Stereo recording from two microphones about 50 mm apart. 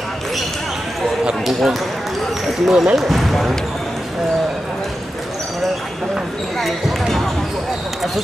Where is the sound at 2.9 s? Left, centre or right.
Centre.